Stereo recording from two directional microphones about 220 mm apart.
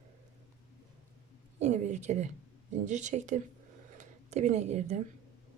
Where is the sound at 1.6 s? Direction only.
30° right (ahead or behind).